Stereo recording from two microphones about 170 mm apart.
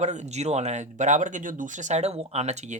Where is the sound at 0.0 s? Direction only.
40° right (ahead or behind).